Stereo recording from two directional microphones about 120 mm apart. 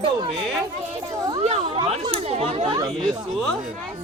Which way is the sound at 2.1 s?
60° right (ahead or behind).